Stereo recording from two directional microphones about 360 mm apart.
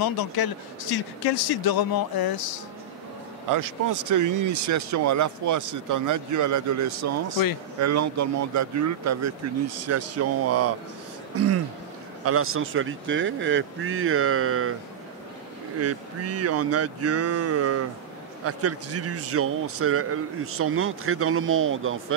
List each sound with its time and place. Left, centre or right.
0.0 s speech: left
3.4 s speech: right
15.8 s speech: right